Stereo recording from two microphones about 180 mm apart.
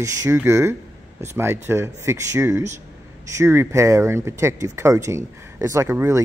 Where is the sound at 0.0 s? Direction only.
15° right (ahead or behind).